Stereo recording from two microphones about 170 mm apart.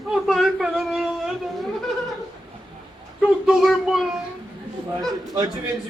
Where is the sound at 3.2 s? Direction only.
Centre (ahead or behind).